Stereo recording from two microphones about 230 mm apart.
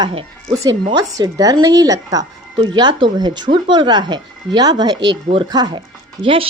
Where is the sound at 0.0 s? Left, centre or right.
Right.